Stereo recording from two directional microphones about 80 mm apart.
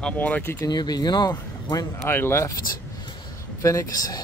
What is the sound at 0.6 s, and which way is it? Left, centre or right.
Speech, left.